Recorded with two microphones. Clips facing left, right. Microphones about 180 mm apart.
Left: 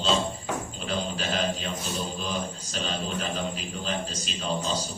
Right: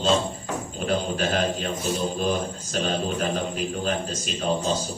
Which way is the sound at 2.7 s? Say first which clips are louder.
Right 6 dB; 55° right (ahead or behind).